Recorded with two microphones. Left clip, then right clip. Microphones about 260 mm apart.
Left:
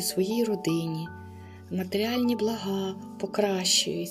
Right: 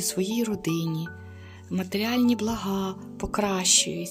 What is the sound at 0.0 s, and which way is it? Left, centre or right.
Speech, right.